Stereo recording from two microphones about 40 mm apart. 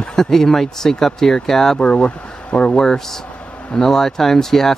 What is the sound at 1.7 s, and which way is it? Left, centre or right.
Speech, left.